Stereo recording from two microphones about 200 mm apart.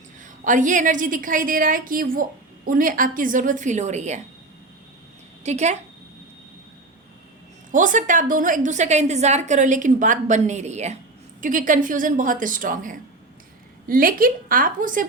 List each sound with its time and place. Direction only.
0.2 s a woman's voice: 40° right (ahead or behind)
5.4 s a woman's voice: 35° right (ahead or behind)
7.7 s a woman's voice: 40° right (ahead or behind)